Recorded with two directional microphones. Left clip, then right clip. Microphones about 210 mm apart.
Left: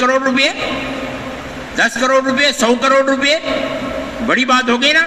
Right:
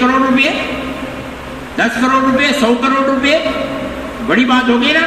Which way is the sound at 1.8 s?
20° left (ahead or behind).